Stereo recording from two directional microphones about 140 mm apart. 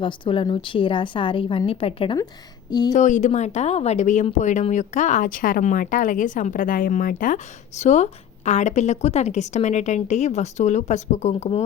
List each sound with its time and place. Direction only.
0.0 s a woman's voice: 35° left (ahead or behind)
2.6 s speech: 30° left (ahead or behind)
2.9 s speech: 60° left (ahead or behind)